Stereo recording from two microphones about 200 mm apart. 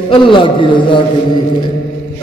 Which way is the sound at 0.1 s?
25° left (ahead or behind).